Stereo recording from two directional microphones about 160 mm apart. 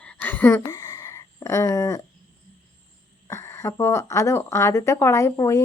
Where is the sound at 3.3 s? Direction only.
15° left (ahead or behind).